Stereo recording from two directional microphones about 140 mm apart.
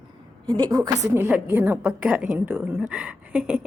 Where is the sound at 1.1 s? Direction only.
15° right (ahead or behind).